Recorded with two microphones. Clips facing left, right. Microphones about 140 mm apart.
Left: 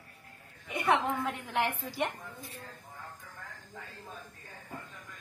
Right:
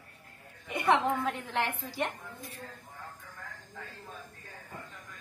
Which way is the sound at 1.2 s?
15° left (ahead or behind).